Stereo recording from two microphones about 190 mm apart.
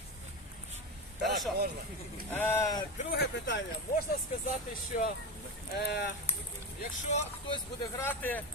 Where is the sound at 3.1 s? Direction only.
60° left (ahead or behind).